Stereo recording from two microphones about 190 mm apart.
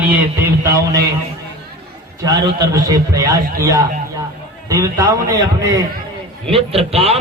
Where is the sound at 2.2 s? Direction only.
20° right (ahead or behind).